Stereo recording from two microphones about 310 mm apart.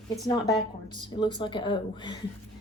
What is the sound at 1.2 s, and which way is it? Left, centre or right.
A woman's voice, centre.